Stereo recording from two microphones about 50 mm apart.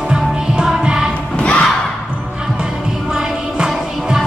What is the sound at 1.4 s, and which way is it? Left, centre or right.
Music, left.